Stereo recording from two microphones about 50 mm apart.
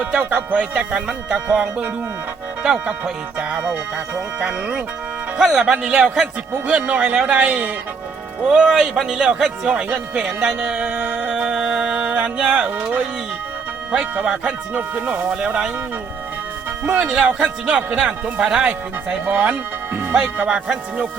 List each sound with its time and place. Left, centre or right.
0.2 s music: right
0.8 s speech: centre
2.6 s speech: centre
4.4 s speech: right
5.4 s speech: centre
8.4 s speech: centre
11.2 s music: right
13.9 s speech: centre
14.8 s music: right
15.4 s speech: centre
17.2 s speech: centre
18.6 s speech: right
19.5 s music: right